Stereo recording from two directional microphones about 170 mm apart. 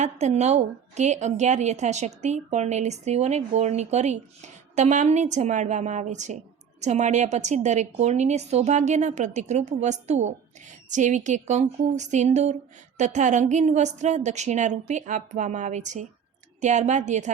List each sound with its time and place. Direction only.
0.0 s a woman's voice: 40° right (ahead or behind)